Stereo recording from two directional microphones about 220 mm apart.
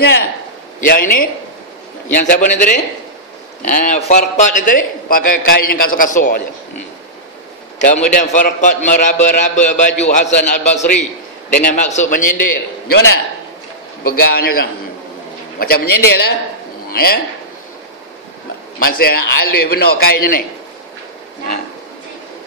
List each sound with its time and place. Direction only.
0.8 s a man's voice: 40° left (ahead or behind)
7.8 s a man's voice: 35° left (ahead or behind)
14.0 s a man's voice: 45° left (ahead or behind)
18.8 s a man's voice: 45° left (ahead or behind)